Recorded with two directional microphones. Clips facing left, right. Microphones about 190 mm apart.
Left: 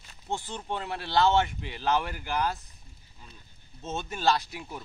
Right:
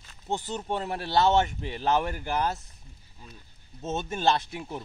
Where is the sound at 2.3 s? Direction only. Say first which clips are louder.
Even; 20° right (ahead or behind).